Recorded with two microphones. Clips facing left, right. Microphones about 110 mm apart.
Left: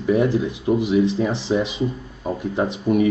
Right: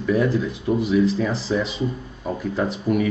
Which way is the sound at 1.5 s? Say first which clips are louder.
Left 2 dB; 20° left (ahead or behind).